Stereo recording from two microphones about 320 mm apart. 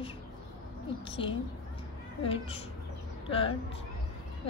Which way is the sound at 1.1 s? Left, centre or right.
Centre.